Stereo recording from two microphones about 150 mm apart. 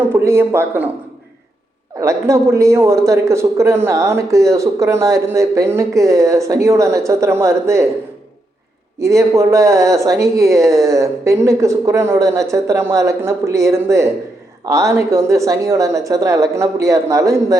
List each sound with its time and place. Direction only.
0.1 s speech: 15° right (ahead or behind)
2.0 s speech: 20° right (ahead or behind)
9.0 s speech: 20° right (ahead or behind)